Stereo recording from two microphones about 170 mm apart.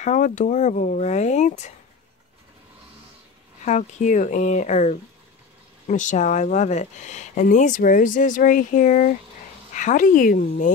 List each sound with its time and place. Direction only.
0.0 s speech: 45° left (ahead or behind)
3.6 s speech: 45° left (ahead or behind)